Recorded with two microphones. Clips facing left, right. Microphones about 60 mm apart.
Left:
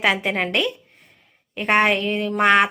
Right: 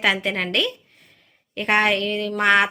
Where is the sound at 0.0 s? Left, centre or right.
Centre.